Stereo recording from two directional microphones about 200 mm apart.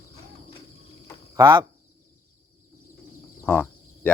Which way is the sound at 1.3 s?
20° right (ahead or behind).